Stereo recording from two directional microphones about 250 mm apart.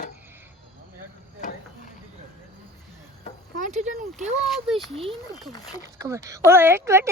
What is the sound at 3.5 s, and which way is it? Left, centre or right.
Speech, right.